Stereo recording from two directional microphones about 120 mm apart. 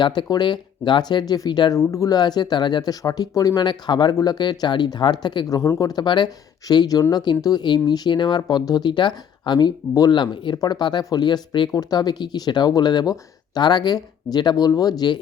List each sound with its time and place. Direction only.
0.0 s speech: 40° left (ahead or behind)